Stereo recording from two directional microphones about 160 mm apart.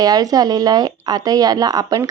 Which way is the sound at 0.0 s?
25° right (ahead or behind).